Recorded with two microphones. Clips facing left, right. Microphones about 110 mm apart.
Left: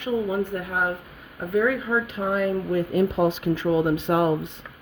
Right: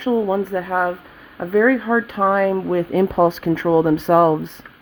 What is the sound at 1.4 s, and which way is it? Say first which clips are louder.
Speech: right 7 dB; 80° right.